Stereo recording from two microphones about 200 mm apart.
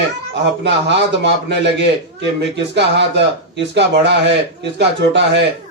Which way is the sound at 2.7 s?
60° right (ahead or behind).